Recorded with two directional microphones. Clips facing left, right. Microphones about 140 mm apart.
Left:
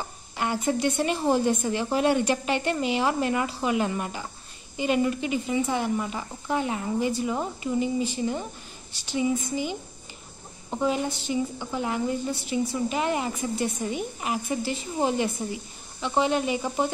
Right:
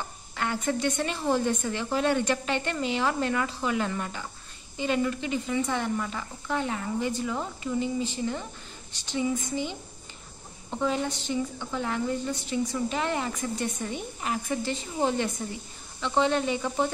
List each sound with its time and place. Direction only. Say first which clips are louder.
0.4 s a woman's voice: left 3 dB; 15° left (ahead or behind)